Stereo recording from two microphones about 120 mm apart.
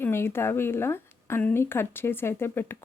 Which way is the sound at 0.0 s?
20° left (ahead or behind).